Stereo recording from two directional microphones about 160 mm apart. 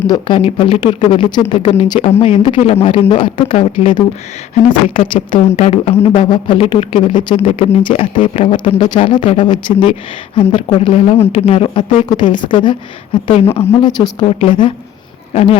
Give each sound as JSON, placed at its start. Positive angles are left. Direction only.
{"t": 0.1, "sound": "speech", "side_deg": 35}
{"t": 7.4, "sound": "speech", "side_deg": 40}
{"t": 13.7, "sound": "speech", "side_deg": 25}